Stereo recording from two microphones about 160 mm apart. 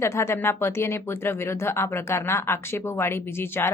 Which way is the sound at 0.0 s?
15° left (ahead or behind).